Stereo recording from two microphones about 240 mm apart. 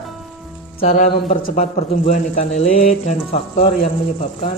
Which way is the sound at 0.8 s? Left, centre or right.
Left.